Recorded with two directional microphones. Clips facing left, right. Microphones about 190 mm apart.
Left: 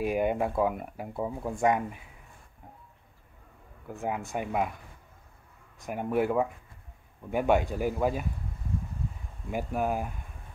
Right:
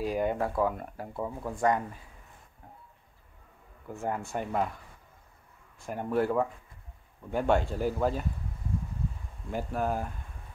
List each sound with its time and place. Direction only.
0.0 s speech: 20° left (ahead or behind)
3.9 s speech: 15° left (ahead or behind)
5.8 s speech: 15° left (ahead or behind)
9.5 s speech: 10° left (ahead or behind)